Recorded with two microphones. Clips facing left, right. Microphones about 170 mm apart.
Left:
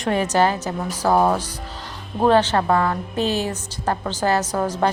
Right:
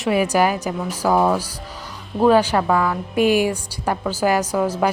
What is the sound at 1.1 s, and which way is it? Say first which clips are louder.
Speech: even; 10° left (ahead or behind).